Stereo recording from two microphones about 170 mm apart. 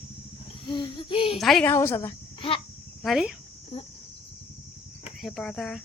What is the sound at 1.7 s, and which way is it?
Speech, 15° left (ahead or behind).